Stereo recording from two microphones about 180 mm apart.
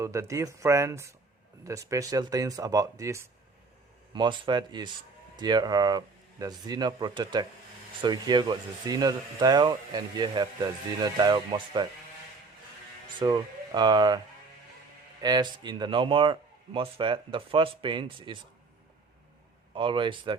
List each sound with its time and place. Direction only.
0.0 s speech: 15° right (ahead or behind)
13.1 s speech: 25° right (ahead or behind)
15.2 s speech: 25° right (ahead or behind)
19.7 s speech: 25° right (ahead or behind)